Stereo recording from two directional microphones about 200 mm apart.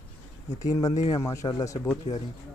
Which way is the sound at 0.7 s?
15° left (ahead or behind).